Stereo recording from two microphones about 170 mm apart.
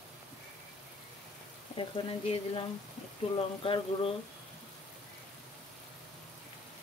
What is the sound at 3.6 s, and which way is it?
Speech, 30° left (ahead or behind).